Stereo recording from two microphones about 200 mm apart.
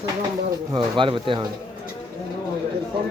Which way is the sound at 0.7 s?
25° right (ahead or behind).